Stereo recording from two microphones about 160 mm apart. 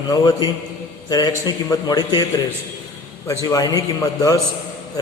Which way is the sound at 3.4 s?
20° left (ahead or behind).